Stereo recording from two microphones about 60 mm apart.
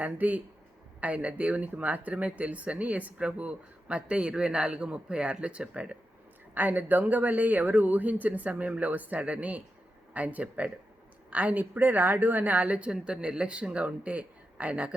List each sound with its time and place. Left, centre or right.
0.0 s speech: right
6.5 s speech: right